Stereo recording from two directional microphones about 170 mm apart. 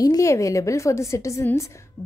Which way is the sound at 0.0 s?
20° left (ahead or behind).